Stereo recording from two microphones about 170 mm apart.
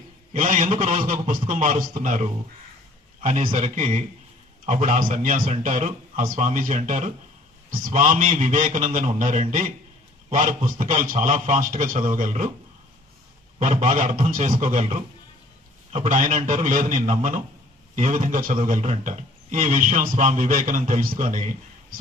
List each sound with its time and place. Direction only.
0.3 s a man's voice: 50° right (ahead or behind)
13.6 s a man's voice: 45° right (ahead or behind)
15.9 s a man's voice: 45° right (ahead or behind)